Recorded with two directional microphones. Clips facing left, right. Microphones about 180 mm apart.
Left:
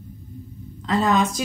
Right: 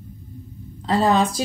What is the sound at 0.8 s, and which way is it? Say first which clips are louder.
Speech: right 2 dB; 30° right (ahead or behind).